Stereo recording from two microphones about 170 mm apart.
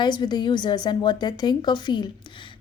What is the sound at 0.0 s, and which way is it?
A woman's voice, 25° left (ahead or behind).